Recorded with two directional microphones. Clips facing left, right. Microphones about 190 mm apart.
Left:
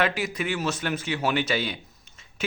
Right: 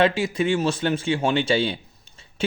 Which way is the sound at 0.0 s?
25° right (ahead or behind).